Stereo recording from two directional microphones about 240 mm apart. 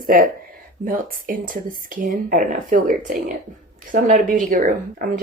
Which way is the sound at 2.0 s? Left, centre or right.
Right.